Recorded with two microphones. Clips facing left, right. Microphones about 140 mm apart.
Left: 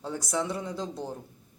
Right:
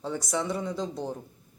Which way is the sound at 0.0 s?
5° left (ahead or behind).